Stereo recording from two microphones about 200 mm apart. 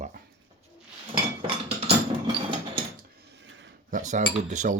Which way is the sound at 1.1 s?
25° right (ahead or behind).